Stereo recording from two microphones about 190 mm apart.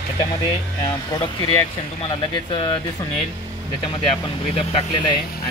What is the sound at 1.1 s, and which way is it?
Speech, 20° left (ahead or behind).